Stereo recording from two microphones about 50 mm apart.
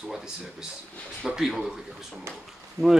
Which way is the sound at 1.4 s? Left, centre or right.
Centre.